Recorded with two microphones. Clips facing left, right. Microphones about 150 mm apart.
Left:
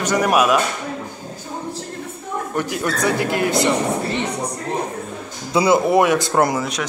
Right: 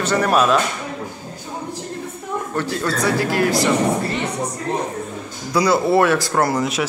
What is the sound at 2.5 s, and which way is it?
Speech, 15° left (ahead or behind).